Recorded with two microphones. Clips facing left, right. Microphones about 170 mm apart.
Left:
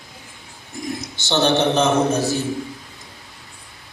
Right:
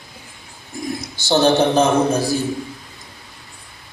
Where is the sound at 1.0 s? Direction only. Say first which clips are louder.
Right 5 dB; 10° right (ahead or behind).